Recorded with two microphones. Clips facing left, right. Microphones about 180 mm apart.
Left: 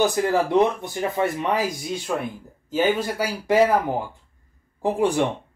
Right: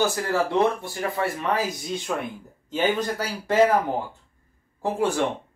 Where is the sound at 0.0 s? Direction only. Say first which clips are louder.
Left 3 dB; 15° left (ahead or behind).